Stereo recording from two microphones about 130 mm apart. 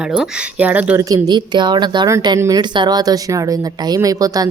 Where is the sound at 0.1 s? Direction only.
10° right (ahead or behind).